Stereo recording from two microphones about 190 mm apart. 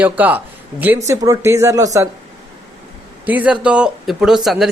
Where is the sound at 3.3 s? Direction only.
5° right (ahead or behind).